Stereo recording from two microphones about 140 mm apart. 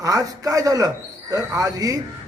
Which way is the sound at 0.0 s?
25° right (ahead or behind).